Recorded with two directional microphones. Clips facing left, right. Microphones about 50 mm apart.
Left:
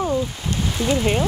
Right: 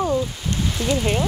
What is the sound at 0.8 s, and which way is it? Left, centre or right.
Speech, left.